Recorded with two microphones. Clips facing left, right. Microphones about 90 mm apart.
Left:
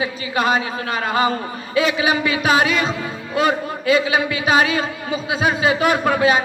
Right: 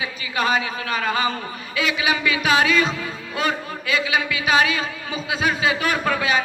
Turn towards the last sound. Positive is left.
turn(degrees=35)  # may be behind; listen again after turning